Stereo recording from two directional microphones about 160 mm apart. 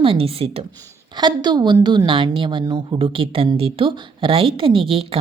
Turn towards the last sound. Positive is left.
turn(degrees=-35)  # may be behind; listen again after turning